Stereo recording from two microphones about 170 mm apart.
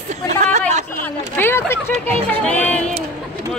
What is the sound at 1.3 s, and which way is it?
Speech, 15° left (ahead or behind).